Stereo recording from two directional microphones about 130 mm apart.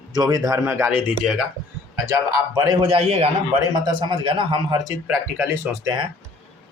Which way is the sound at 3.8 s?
40° right (ahead or behind).